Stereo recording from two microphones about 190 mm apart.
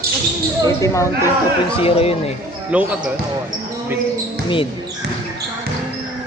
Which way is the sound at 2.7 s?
5° right (ahead or behind).